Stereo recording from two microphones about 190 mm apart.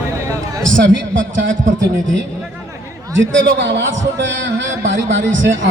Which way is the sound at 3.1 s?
75° right (ahead or behind).